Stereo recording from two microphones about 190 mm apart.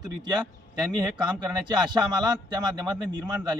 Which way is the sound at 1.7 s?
20° right (ahead or behind).